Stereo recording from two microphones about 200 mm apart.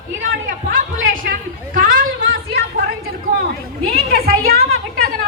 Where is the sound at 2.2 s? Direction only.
55° right (ahead or behind).